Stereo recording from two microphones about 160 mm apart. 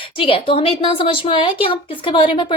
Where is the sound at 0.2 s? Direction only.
35° left (ahead or behind).